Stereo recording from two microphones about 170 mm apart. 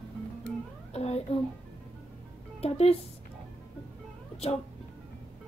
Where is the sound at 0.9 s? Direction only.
40° left (ahead or behind).